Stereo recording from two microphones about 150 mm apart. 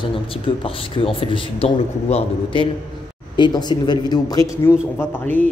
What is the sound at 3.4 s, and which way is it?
Speech, 30° left (ahead or behind).